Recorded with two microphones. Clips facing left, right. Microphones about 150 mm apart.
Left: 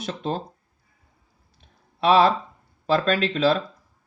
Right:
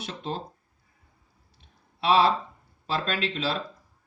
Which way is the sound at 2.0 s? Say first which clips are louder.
Left 4 dB; 45° left (ahead or behind).